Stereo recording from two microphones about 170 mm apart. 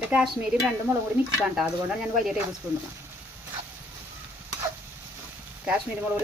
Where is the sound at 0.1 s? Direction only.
5° right (ahead or behind).